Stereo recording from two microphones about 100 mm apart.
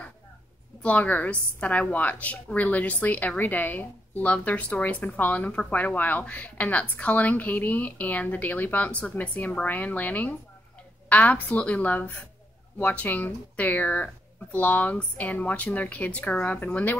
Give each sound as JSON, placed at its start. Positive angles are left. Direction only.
{"t": 0.8, "sound": "a woman's voice", "side_deg": 15}